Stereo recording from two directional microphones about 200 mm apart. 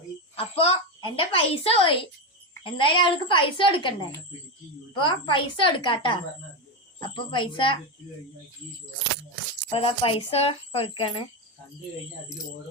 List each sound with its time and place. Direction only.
0.3 s a woman's voice: 25° left (ahead or behind)
4.9 s speech: 25° left (ahead or behind)
9.6 s speech: 25° left (ahead or behind)